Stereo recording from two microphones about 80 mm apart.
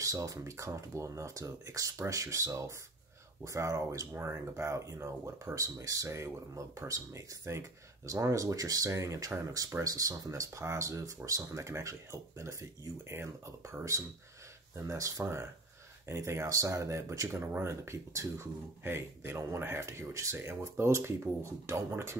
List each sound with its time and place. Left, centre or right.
0.0 s speech: right
14.9 s speech: right
17.3 s speech: right
17.8 s speech: right